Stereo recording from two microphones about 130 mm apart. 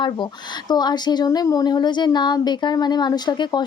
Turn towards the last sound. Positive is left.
turn(degrees=35)  # may be behind; listen again after turning